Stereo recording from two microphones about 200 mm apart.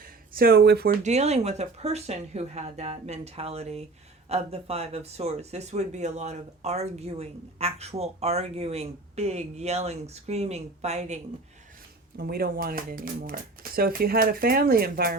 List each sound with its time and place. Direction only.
0.0 s a sound: 50° right (ahead or behind)
1.0 s speech: 35° right (ahead or behind)
12.1 s speech: 50° right (ahead or behind)